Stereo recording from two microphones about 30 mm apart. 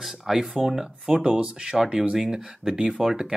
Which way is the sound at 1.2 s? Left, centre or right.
Right.